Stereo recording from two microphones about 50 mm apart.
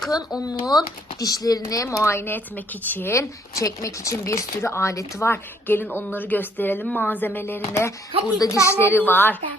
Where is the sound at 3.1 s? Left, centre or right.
Left.